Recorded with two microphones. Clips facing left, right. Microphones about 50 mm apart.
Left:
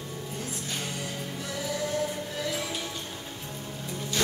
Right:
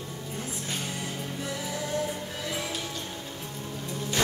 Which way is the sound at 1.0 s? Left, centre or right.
Centre.